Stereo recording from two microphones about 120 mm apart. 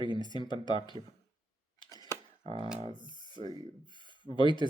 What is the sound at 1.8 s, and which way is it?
Arrow, 35° right (ahead or behind).